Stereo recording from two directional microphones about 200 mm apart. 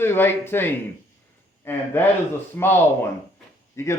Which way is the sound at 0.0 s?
10° left (ahead or behind).